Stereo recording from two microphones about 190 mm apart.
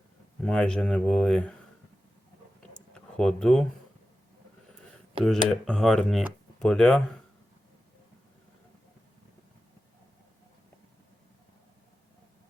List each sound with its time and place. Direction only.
0.4 s speech: 5° left (ahead or behind)
2.7 s a sound: 5° left (ahead or behind)
5.2 s speech: 30° right (ahead or behind)
5.6 s speech: 5° left (ahead or behind)